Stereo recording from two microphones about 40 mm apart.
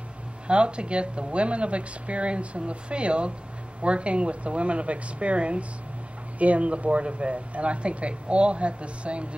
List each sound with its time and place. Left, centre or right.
0.5 s speech: right